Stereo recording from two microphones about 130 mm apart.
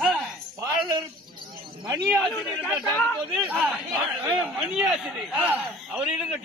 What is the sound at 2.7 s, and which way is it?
Speech, centre (ahead or behind).